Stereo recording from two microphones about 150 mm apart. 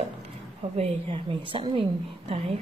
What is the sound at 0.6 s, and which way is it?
A woman's voice, 40° right (ahead or behind).